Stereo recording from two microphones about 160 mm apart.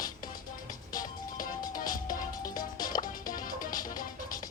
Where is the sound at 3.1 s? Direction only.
60° left (ahead or behind).